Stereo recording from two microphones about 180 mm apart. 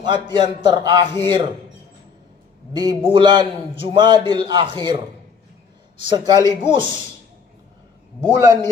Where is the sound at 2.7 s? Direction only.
20° right (ahead or behind).